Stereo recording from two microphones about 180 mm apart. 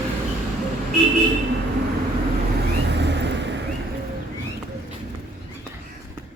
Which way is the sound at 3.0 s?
75° right (ahead or behind).